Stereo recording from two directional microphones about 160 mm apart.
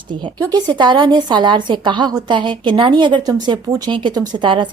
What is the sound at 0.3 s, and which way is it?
A woman's voice, 25° right (ahead or behind).